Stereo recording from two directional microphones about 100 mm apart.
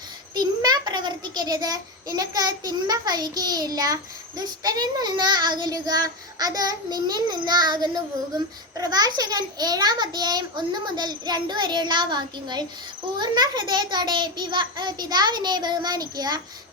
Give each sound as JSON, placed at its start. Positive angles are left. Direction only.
{"t": 0.3, "sound": "a child's voice", "side_deg": -45}